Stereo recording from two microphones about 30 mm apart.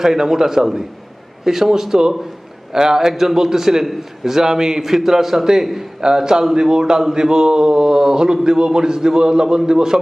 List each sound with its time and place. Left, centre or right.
0.0 s a man's voice: centre
6.0 s a man's voice: right